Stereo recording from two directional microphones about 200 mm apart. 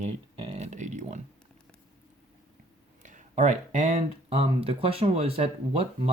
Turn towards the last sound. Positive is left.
turn(degrees=-30)  # may be behind; listen again after turning